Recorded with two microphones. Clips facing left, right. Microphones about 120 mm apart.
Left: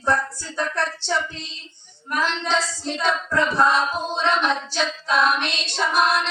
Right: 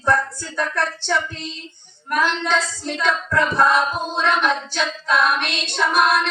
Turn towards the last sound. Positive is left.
turn(degrees=-55)  # may be behind; listen again after turning